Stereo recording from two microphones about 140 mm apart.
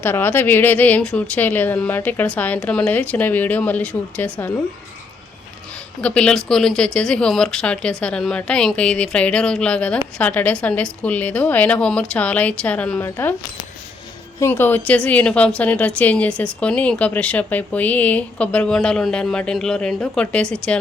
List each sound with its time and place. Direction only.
0.0 s a woman's voice: 15° left (ahead or behind)
6.0 s a woman's voice: 10° left (ahead or behind)
14.3 s a woman's voice: 20° left (ahead or behind)